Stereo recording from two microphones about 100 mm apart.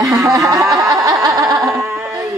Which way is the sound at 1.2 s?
40° right (ahead or behind).